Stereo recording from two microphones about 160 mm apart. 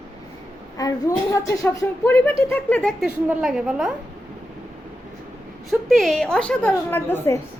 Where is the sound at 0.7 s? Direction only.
20° left (ahead or behind).